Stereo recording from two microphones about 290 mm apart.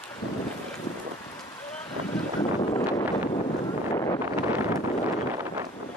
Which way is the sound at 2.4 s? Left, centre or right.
Centre.